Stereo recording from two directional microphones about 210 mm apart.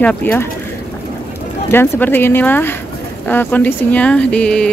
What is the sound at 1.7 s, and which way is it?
Speech, 10° left (ahead or behind).